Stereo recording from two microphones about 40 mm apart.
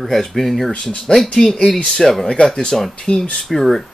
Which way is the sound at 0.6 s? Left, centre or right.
Centre.